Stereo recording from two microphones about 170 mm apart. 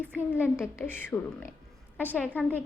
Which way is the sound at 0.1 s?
10° left (ahead or behind).